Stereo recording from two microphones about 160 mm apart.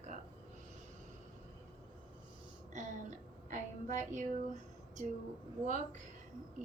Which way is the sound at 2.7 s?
50° right (ahead or behind).